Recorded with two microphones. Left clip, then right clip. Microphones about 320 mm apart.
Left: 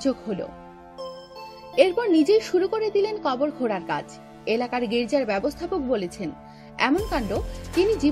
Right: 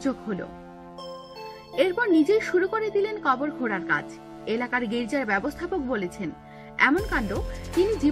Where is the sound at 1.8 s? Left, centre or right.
Left.